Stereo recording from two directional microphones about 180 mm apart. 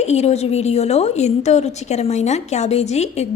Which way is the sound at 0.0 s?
40° left (ahead or behind).